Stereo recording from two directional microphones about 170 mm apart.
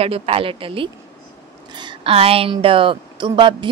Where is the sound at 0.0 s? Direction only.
35° right (ahead or behind).